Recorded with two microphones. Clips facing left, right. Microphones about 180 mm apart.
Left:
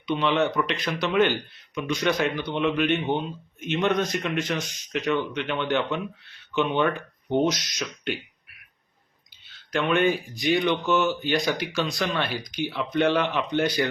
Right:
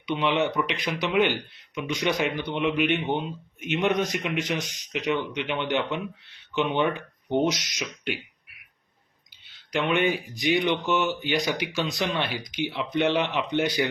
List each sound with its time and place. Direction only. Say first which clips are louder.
0.1 s speech: left 1 dB; 15° right (ahead or behind)
9.7 s speech: left 2 dB; 15° right (ahead or behind)